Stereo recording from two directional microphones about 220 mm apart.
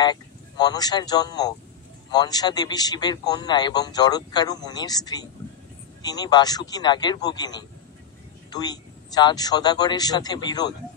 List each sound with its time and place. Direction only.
0.0 s a man's voice: 20° left (ahead or behind)